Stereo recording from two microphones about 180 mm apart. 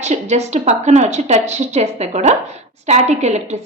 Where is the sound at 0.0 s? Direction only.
40° right (ahead or behind).